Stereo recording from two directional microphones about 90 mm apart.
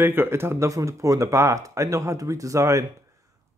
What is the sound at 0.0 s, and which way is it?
Speech, 25° right (ahead or behind).